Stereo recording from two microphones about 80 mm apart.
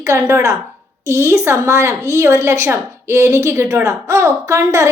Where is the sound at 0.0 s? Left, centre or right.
Right.